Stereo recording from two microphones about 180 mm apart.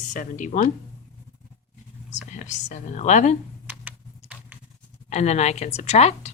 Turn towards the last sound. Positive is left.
turn(degrees=35)  # may be behind; listen again after turning